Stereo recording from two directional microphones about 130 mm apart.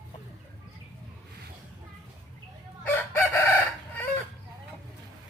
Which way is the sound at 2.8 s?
15° left (ahead or behind).